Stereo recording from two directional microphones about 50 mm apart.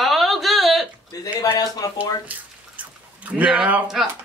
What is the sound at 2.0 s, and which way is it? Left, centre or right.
Drip, right.